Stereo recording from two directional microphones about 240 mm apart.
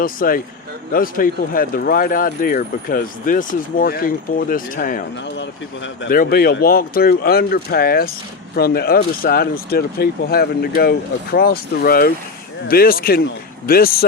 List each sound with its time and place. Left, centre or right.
0.0 s speech: left